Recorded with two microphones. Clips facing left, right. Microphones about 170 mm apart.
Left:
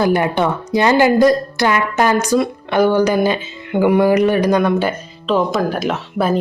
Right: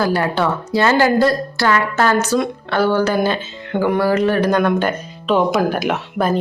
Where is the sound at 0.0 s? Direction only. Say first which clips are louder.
Left 2 dB; 20° left (ahead or behind).